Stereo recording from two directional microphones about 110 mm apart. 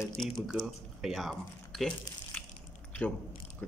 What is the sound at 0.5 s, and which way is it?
Speech, 5° right (ahead or behind).